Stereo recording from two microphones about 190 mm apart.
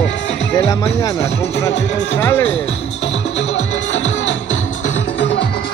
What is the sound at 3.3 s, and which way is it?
Music, 90° left.